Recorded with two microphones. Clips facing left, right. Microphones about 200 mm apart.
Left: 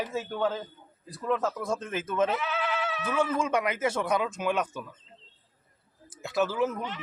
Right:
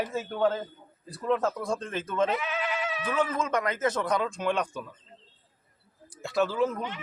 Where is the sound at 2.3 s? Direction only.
10° right (ahead or behind).